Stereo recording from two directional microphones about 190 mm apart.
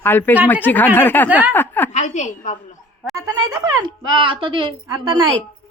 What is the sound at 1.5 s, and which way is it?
Speech, 10° left (ahead or behind).